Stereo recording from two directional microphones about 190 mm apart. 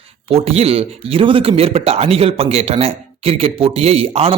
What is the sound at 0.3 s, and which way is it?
A man's voice, 30° right (ahead or behind).